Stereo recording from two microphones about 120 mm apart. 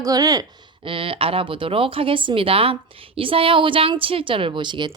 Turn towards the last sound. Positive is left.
turn(degrees=-40)  # may be behind; listen again after turning